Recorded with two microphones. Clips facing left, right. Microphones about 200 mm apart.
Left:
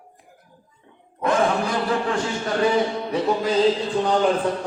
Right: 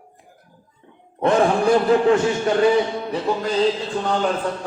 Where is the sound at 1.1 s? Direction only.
30° right (ahead or behind).